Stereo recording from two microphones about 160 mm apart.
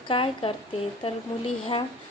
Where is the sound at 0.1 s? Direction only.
35° left (ahead or behind).